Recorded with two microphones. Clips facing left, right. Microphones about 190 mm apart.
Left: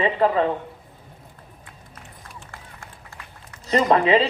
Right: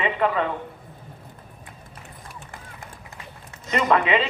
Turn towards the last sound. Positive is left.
turn(degrees=35)  # may be behind; listen again after turning